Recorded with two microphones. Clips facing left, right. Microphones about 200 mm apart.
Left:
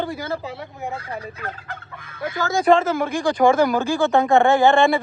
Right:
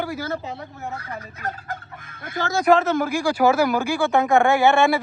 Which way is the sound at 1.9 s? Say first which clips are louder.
Left 4 dB; 50° right (ahead or behind).